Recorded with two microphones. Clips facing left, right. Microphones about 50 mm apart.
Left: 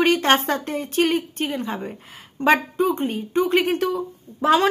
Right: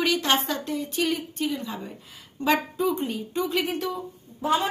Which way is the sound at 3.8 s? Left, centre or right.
Left.